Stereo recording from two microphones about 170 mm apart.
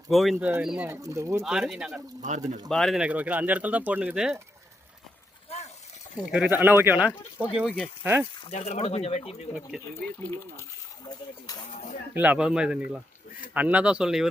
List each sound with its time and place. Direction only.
0.1 s speech: centre (ahead or behind)
0.9 s speech: 20° right (ahead or behind)
1.5 s speech: 5° right (ahead or behind)
2.2 s speech: 45° right (ahead or behind)
2.6 s speech: centre (ahead or behind)
6.3 s speech: 10° right (ahead or behind)
8.4 s speech: 40° left (ahead or behind)
9.6 s speech: centre (ahead or behind)
10.1 s speech: 10° left (ahead or behind)
11.0 s stir: 25° left (ahead or behind)
12.1 s speech: 10° right (ahead or behind)